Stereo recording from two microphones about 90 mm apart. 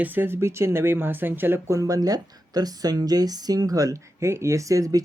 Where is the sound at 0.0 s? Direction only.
20° right (ahead or behind).